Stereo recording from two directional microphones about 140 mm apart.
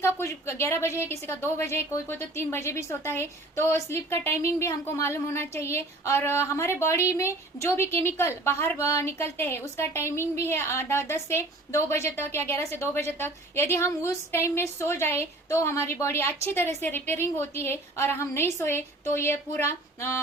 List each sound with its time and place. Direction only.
0.0 s speech: 20° left (ahead or behind)